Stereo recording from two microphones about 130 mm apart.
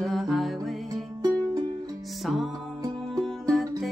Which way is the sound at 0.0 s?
Centre (ahead or behind).